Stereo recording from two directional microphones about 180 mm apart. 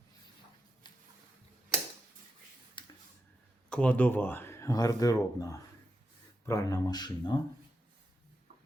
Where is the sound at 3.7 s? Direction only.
5° left (ahead or behind); by 7.4 s 25° left (ahead or behind).